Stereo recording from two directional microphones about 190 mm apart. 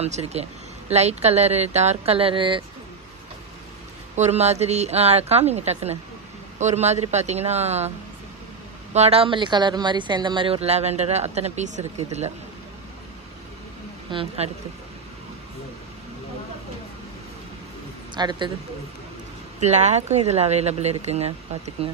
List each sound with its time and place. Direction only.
0.0 s speech: 35° right (ahead or behind)
4.1 s speech: 35° right (ahead or behind)
8.9 s speech: 35° right (ahead or behind)
14.1 s speech: 35° right (ahead or behind)
18.1 s a man's voice: 25° right (ahead or behind)
19.6 s speech: 35° right (ahead or behind)